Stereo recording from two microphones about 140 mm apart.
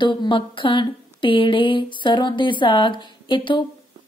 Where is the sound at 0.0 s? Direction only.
35° left (ahead or behind).